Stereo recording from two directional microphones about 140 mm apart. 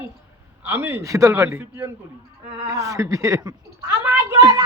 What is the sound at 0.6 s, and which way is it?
A man's voice, 15° right (ahead or behind).